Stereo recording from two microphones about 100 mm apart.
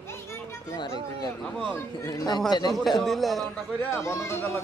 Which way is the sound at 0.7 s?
45° left (ahead or behind).